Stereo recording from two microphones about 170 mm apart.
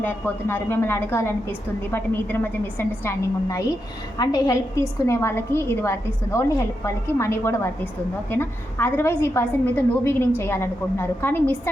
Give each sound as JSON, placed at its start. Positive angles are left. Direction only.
{"t": 0.0, "sound": "a woman's voice", "side_deg": 10}